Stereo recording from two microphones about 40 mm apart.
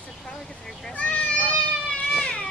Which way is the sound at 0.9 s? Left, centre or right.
Left.